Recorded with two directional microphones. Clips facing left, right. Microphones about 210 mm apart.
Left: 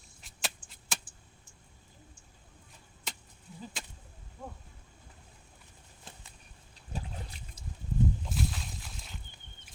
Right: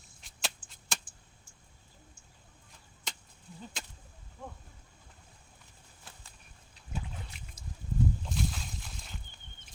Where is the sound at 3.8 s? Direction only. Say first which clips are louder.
Left 1 dB; centre (ahead or behind).